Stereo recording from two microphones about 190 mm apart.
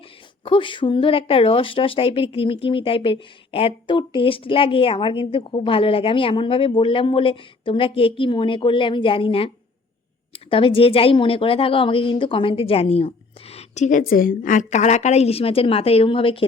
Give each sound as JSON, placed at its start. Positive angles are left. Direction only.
{"t": 0.4, "sound": "speech", "side_deg": 25}